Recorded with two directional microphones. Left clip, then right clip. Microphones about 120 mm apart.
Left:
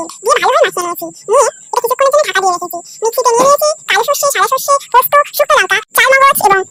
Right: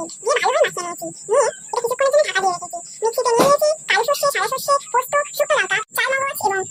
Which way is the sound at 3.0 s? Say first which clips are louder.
Left 6 dB; 35° left (ahead or behind).